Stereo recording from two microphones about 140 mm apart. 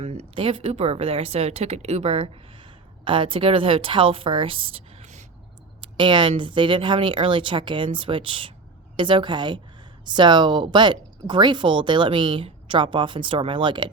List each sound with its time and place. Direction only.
0.0 s a woman's voice: 45° right (ahead or behind)
5.8 s speech: 35° right (ahead or behind)